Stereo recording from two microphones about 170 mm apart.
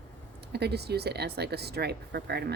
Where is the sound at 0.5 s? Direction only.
70° right (ahead or behind).